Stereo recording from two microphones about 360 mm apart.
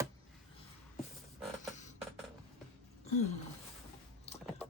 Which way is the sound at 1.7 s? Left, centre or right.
Centre.